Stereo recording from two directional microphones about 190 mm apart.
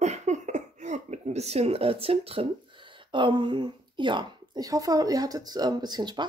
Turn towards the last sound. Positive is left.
turn(degrees=-20)  # may be behind; listen again after turning